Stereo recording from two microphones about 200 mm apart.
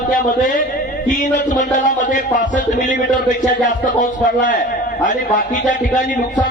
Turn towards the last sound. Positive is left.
turn(degrees=40)  # may be behind; listen again after turning